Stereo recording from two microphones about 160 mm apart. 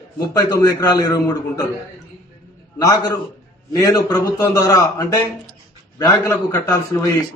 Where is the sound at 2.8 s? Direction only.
25° left (ahead or behind).